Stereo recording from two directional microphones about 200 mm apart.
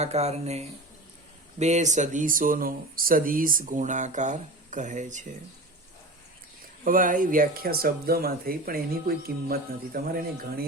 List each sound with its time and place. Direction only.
0.0 s speech: 35° right (ahead or behind)
6.8 s speech: 40° right (ahead or behind)